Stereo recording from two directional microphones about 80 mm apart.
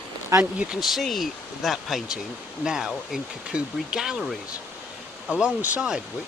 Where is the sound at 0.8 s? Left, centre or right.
Centre.